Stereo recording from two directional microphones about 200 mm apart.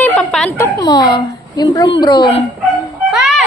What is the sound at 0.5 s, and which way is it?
A woman's voice, 20° left (ahead or behind).